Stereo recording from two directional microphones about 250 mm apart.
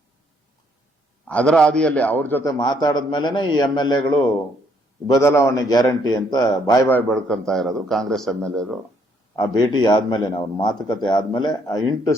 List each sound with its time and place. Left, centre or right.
1.2 s a man's voice: centre
9.3 s a man's voice: centre